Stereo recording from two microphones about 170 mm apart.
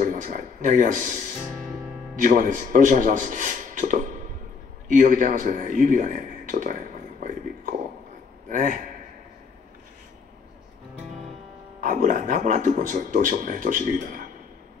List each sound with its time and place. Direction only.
0.0 s a sound: 50° right (ahead or behind)
2.1 s speech: 50° right (ahead or behind)
8.5 s a man's voice: 50° right (ahead or behind)
11.8 s speech: 50° right (ahead or behind)